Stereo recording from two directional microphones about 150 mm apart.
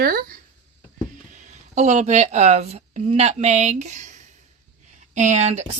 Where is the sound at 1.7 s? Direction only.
50° right (ahead or behind).